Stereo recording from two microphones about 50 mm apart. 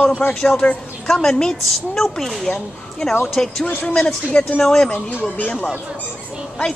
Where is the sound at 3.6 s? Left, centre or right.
Left.